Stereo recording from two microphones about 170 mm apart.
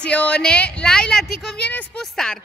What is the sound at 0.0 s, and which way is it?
A woman's voice, 5° left (ahead or behind).